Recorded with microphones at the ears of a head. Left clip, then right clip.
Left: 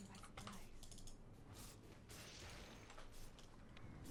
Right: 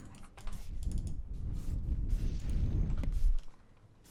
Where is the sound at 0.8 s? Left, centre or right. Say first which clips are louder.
Right 11 dB; right.